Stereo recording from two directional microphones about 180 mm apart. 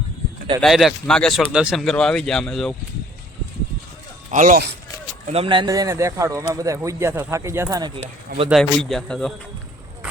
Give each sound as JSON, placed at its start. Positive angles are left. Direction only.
{"t": 0.6, "sound": "speech", "side_deg": 0}
{"t": 4.3, "sound": "speech", "side_deg": -45}
{"t": 5.2, "sound": "a man's voice", "side_deg": -35}
{"t": 8.4, "sound": "speech", "side_deg": 0}